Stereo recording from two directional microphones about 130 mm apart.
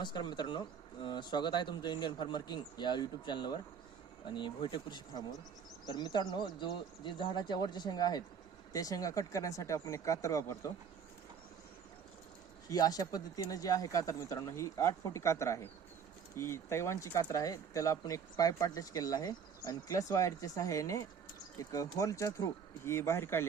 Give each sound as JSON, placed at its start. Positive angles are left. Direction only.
{"t": 0.0, "sound": "speech", "side_deg": 35}
{"t": 12.6, "sound": "speech", "side_deg": 30}